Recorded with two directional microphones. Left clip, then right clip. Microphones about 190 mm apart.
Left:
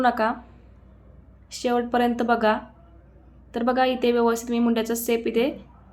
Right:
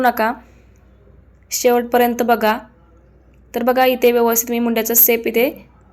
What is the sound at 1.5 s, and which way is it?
A woman's voice, 20° right (ahead or behind).